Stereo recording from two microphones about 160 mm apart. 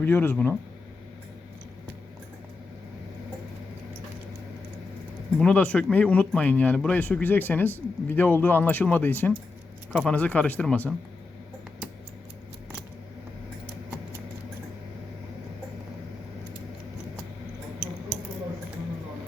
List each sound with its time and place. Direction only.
0.0 s speech: 10° left (ahead or behind)
5.4 s speech: 5° left (ahead or behind)